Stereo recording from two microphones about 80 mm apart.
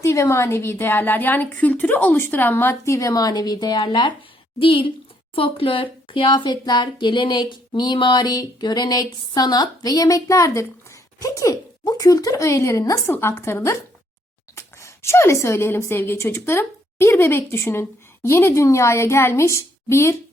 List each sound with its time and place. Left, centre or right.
0.0 s a woman's voice: left
2.8 s speech: left
4.6 s a woman's voice: left
13.1 s a woman's voice: left